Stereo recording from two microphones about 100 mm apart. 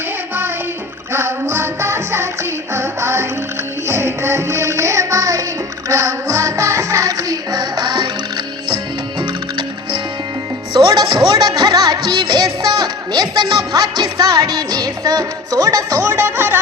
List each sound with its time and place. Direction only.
1.1 s music: 25° right (ahead or behind); by 8.0 s 45° right (ahead or behind)
10.8 s music: 50° right (ahead or behind); by 16.6 s 20° right (ahead or behind)